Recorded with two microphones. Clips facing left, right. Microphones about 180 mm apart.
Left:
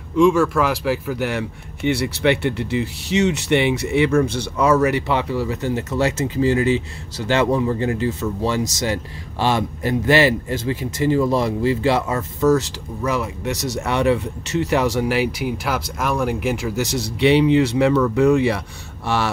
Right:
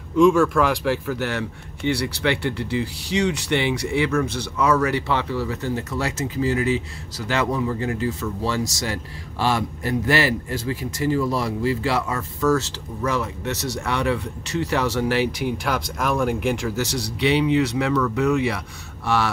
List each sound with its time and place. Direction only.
0.1 s a man's voice: centre (ahead or behind)
16.7 s a man's voice: 20° left (ahead or behind)